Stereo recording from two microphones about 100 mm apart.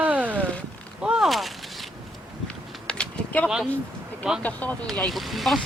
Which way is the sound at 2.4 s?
10° left (ahead or behind).